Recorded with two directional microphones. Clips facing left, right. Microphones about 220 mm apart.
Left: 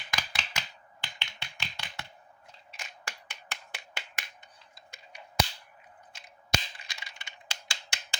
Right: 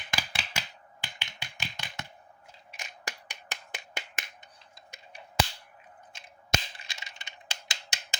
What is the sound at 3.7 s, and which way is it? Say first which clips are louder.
Finger snapping: right 5 dB; 20° right (ahead or behind).